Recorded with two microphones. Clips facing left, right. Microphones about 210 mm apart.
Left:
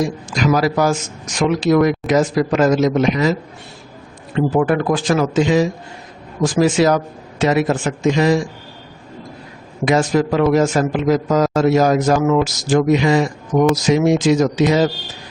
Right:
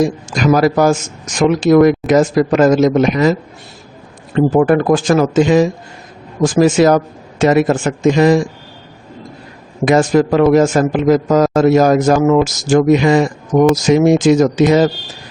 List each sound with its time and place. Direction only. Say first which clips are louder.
0.0 s a man's voice: right 4 dB; 50° right (ahead or behind)
4.4 s a man's voice: right 5 dB; 45° right (ahead or behind)
9.8 s a man's voice: right 4 dB; 50° right (ahead or behind)